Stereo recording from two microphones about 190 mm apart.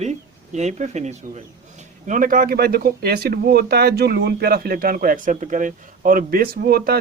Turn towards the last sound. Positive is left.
turn(degrees=-55)  # may be behind; listen again after turning